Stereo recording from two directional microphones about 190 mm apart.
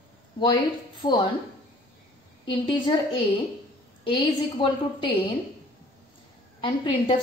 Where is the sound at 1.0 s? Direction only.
20° left (ahead or behind).